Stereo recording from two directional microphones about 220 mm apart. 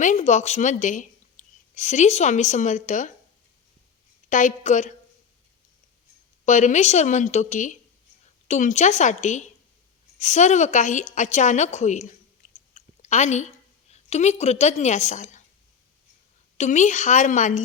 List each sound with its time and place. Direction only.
0.0 s speech: 35° left (ahead or behind)
4.3 s speech: 35° left (ahead or behind)
6.4 s speech: 35° left (ahead or behind)
12.7 s a sound: 30° left (ahead or behind)
13.9 s a woman's voice: 30° left (ahead or behind)
16.6 s speech: 35° left (ahead or behind)